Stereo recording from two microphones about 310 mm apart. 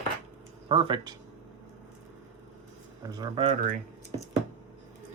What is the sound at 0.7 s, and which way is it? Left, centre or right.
Speech, centre.